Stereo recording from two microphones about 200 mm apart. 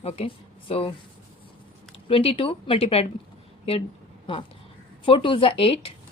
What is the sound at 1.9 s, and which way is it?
Speech, 30° left (ahead or behind).